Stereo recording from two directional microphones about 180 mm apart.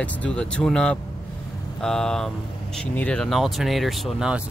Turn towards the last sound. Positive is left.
turn(degrees=0)  # may be behind; listen again after turning